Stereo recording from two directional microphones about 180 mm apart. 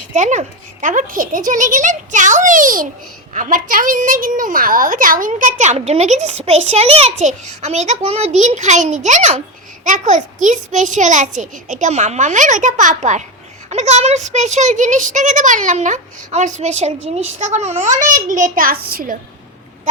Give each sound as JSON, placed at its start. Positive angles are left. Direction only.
{"t": 0.1, "sound": "a child's voice", "side_deg": -40}